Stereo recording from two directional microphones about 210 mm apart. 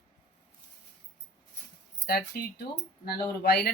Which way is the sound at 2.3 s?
45° left (ahead or behind).